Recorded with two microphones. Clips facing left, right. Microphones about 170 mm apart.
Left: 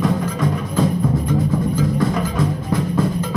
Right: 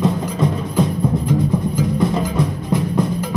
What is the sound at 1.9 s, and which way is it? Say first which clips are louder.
Music: right 1 dB; 20° right (ahead or behind).